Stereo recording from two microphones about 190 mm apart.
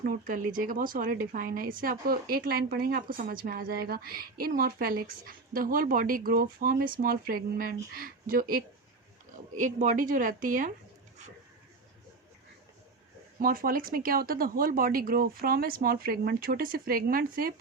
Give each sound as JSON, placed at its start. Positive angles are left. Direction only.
{"t": 0.0, "sound": "speech", "side_deg": -50}
{"t": 13.4, "sound": "speech", "side_deg": -50}